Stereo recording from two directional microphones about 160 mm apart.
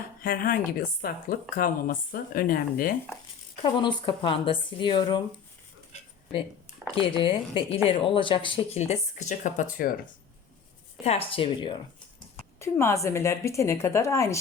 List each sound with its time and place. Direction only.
0.2 s speech: 65° left (ahead or behind)
3.6 s speech: 30° left (ahead or behind)
7.2 s a woman's voice: 30° left (ahead or behind)
8.8 s speech: 45° left (ahead or behind)
11.0 s a woman's voice: 40° left (ahead or behind)
12.5 s a woman's voice: 15° left (ahead or behind)